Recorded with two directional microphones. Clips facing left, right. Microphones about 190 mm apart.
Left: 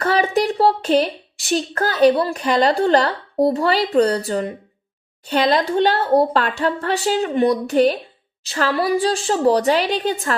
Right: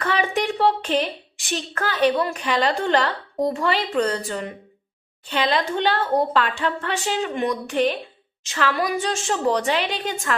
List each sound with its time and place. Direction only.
0.0 s a woman's voice: 40° left (ahead or behind)